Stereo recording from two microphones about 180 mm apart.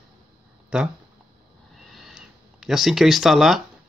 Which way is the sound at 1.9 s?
Centre (ahead or behind).